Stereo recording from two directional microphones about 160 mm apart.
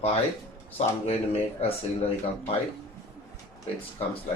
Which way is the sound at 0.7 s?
40° left (ahead or behind).